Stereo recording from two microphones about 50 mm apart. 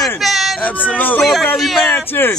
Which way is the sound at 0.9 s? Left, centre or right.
Left.